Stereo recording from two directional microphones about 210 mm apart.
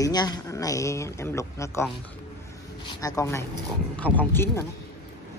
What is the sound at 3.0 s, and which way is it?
Speech, 15° left (ahead or behind).